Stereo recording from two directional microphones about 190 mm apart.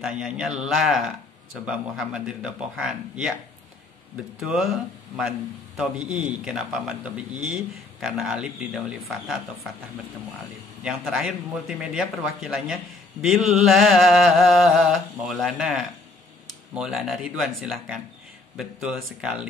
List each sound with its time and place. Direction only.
0.0 s a man's voice: 5° right (ahead or behind)
4.4 s a man's voice: centre (ahead or behind)
10.8 s a man's voice: 5° right (ahead or behind)